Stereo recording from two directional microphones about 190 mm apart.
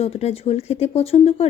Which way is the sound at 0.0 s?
35° left (ahead or behind).